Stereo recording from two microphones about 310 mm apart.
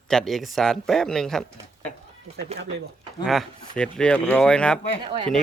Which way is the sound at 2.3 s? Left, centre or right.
Right.